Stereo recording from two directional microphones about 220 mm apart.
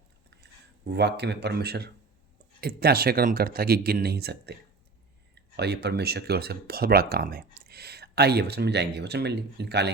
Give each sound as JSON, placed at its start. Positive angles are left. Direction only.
{"t": 0.9, "sound": "speech", "side_deg": -50}